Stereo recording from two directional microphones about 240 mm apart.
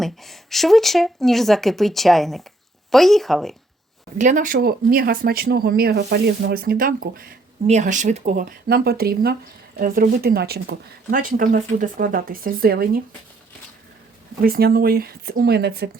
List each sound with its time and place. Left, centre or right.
0.0 s speech: centre
4.2 s speech: right
14.4 s speech: right